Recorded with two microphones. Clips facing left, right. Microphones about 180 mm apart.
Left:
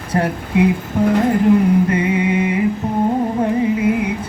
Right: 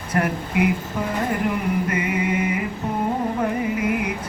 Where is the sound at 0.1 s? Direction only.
25° left (ahead or behind).